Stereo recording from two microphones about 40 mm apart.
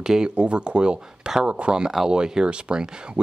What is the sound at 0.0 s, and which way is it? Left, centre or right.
Speech, centre.